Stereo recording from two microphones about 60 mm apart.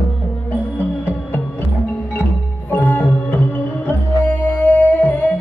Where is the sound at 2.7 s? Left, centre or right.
Left.